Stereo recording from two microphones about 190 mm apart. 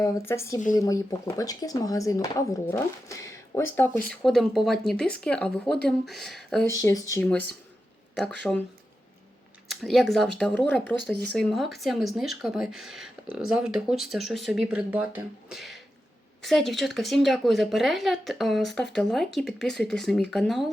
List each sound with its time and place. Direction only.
0.0 s speech: 15° left (ahead or behind)
4.1 s speech: 5° left (ahead or behind)
6.7 s speech: 15° left (ahead or behind)
9.6 s speech: centre (ahead or behind)